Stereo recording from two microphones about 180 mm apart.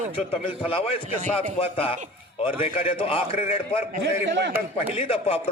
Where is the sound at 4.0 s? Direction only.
75° right (ahead or behind).